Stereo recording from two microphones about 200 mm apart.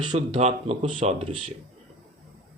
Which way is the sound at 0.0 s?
25° right (ahead or behind).